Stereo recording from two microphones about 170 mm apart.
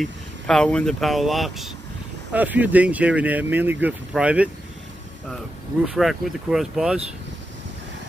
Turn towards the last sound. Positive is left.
turn(degrees=0)  # may be behind; listen again after turning